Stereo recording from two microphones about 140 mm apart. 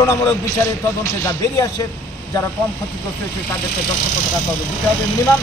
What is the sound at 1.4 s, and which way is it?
Speech, 25° left (ahead or behind).